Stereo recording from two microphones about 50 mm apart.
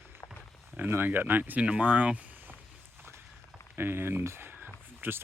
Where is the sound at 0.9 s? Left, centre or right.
Right.